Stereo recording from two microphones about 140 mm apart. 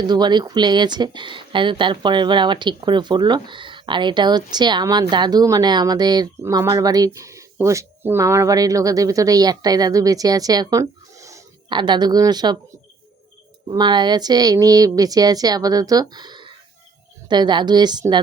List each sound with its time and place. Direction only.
0.0 s speech: 30° right (ahead or behind)
13.7 s a woman's voice: 30° right (ahead or behind)